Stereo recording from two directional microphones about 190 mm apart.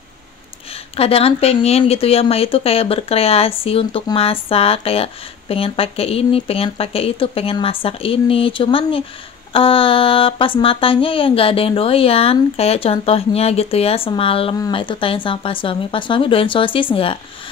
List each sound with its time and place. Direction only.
0.9 s speech: 30° left (ahead or behind)